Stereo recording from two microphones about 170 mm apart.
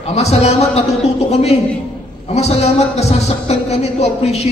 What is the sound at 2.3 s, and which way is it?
Speech, 40° left (ahead or behind).